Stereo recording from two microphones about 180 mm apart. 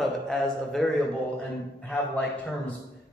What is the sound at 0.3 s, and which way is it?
A man's voice, 5° left (ahead or behind).